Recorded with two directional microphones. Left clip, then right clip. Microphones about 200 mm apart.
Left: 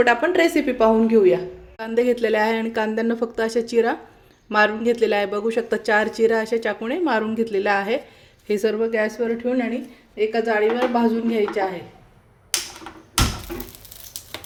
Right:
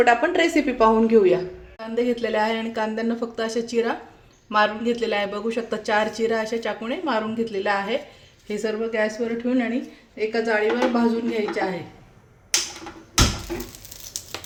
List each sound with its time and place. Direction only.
0.0 s a woman's voice: 20° left (ahead or behind)
1.8 s a woman's voice: 45° left (ahead or behind)